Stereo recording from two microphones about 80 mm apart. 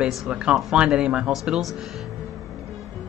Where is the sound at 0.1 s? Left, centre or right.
Centre.